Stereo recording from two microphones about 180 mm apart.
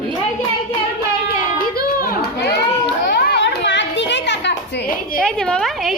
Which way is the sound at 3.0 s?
60° left (ahead or behind).